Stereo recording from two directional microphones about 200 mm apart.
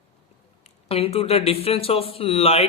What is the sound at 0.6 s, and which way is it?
Speech, 30° left (ahead or behind).